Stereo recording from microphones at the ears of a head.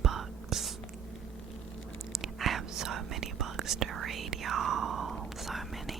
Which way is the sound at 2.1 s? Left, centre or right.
Right.